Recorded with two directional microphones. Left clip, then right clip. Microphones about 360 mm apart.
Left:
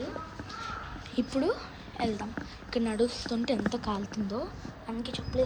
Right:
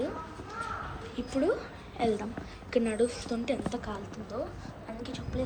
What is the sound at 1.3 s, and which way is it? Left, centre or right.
A woman's voice, centre.